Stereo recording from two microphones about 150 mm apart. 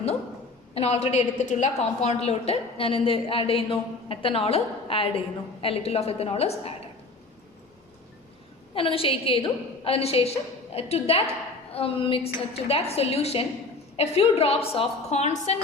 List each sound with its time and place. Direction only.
0.7 s a woman's voice: 45° left (ahead or behind)
8.7 s a woman's voice: 35° left (ahead or behind)